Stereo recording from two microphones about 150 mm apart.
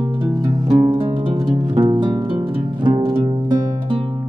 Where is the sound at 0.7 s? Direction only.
30° right (ahead or behind).